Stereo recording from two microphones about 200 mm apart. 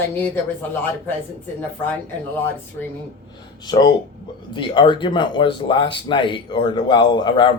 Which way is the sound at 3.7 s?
20° left (ahead or behind).